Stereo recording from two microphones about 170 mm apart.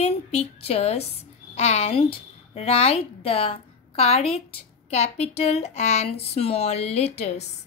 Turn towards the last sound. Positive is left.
turn(degrees=40)  # may be behind; listen again after turning